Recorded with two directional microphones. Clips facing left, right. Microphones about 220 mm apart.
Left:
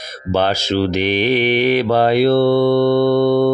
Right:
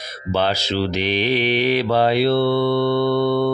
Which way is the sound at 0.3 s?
50° left (ahead or behind).